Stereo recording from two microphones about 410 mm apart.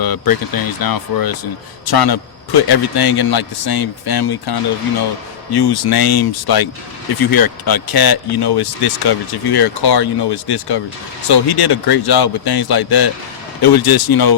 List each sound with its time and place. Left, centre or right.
0.0 s speech: left